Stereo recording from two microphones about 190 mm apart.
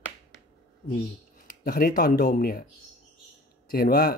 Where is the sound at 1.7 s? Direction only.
55° left (ahead or behind).